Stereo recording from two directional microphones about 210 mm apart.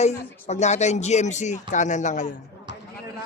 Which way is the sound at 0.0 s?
35° left (ahead or behind).